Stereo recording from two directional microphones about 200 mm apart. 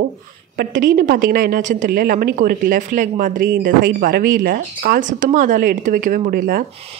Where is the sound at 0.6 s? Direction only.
45° right (ahead or behind).